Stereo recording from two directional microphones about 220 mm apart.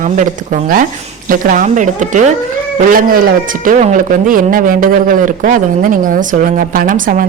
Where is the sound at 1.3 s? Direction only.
40° right (ahead or behind).